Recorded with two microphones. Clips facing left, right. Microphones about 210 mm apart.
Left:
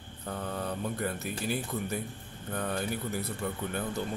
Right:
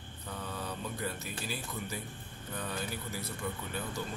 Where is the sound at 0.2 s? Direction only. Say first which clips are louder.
Left 6 dB; 55° left (ahead or behind).